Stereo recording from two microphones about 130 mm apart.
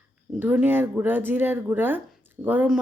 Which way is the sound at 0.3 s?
15° right (ahead or behind).